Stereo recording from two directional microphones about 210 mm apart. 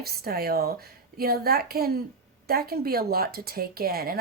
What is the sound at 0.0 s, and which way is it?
Speech, 45° right (ahead or behind).